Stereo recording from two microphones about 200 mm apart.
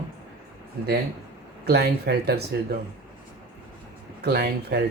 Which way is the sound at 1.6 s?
55° right (ahead or behind).